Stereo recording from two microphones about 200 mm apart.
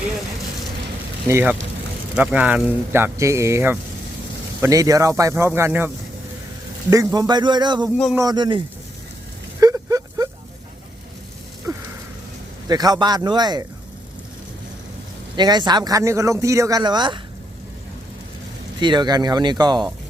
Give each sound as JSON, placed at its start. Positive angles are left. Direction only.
{"t": 1.3, "sound": "speech", "side_deg": -10}
{"t": 6.9, "sound": "speech", "side_deg": -15}
{"t": 9.6, "sound": "a sound", "side_deg": -15}
{"t": 11.7, "sound": "a sound", "side_deg": -15}
{"t": 12.6, "sound": "speech", "side_deg": -20}
{"t": 15.4, "sound": "speech", "side_deg": -20}
{"t": 18.8, "sound": "speech", "side_deg": -20}